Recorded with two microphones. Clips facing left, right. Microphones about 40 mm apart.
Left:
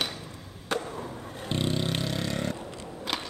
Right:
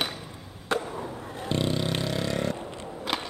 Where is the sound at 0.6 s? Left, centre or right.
Centre.